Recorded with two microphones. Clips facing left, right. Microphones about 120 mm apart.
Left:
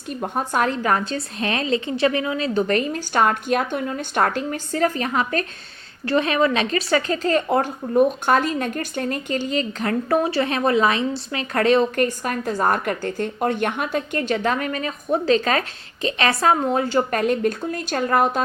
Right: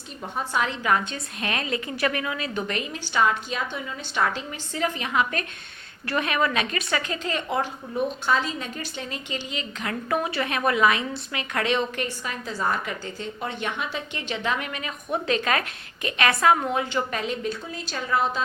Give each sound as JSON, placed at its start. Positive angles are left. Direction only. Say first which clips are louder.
{"t": 0.2, "sound": "speech", "louder": "left 5 dB", "side_deg": 50}